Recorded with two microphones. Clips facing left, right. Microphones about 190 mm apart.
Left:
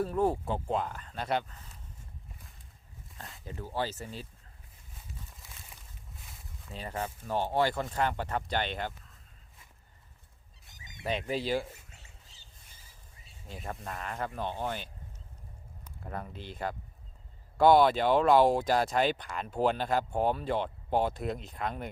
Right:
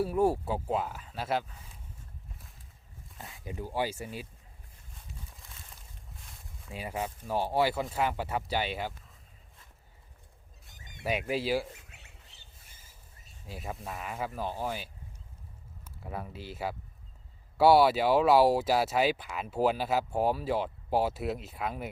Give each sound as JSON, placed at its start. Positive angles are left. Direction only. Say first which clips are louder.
{"t": 0.0, "sound": "speech", "louder": "right 2 dB", "side_deg": -10}
{"t": 3.2, "sound": "speech", "louder": "right 1 dB", "side_deg": 0}
{"t": 3.4, "sound": "speech", "louder": "right 2 dB", "side_deg": -15}
{"t": 5.4, "sound": "a sound", "louder": "even", "side_deg": 5}
{"t": 6.7, "sound": "speech", "louder": "right 1 dB", "side_deg": -10}
{"t": 10.8, "sound": "a sound", "louder": "even", "side_deg": -55}
{"t": 11.0, "sound": "speech", "louder": "right 1 dB", "side_deg": -10}
{"t": 11.9, "sound": "bird", "louder": "right 1 dB", "side_deg": -65}
{"t": 13.5, "sound": "speech", "louder": "right 1 dB", "side_deg": -5}